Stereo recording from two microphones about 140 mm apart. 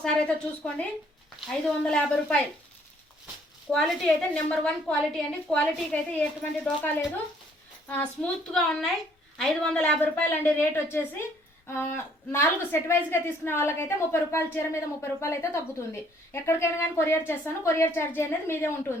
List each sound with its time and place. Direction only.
0.0 s a woman's voice: 5° left (ahead or behind)
3.7 s a woman's voice: 5° left (ahead or behind)